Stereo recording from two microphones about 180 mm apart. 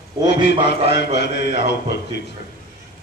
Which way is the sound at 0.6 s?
35° right (ahead or behind).